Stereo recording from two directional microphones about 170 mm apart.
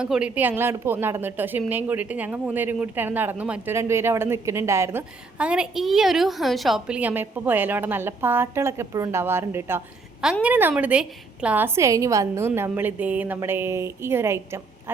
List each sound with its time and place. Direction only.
0.0 s a woman's voice: 5° right (ahead or behind)